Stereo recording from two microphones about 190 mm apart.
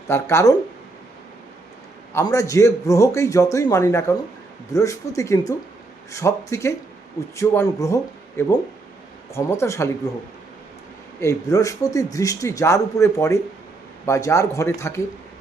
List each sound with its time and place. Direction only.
0.1 s speech: 15° left (ahead or behind)
2.1 s speech: 15° left (ahead or behind)
11.2 s speech: 15° left (ahead or behind)